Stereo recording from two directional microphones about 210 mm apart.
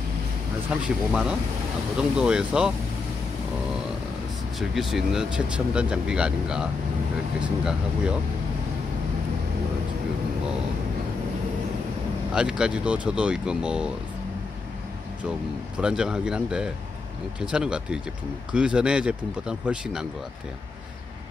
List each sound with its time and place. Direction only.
0.8 s speech: 5° right (ahead or behind)
4.6 s speech: centre (ahead or behind)
12.4 s speech: 5° right (ahead or behind)
15.8 s speech: 5° right (ahead or behind)